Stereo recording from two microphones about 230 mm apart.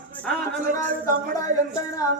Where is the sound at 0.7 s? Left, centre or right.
Right.